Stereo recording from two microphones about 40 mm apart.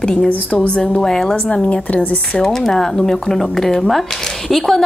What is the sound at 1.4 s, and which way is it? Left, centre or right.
Speech, left.